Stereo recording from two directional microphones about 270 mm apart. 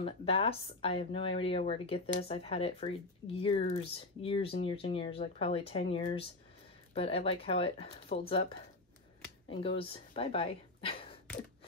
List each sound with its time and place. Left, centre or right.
0.0 s speech: left
9.5 s a woman's voice: centre